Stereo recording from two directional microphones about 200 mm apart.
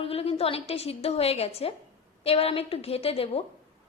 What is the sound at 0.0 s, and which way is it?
A woman's voice, 30° left (ahead or behind).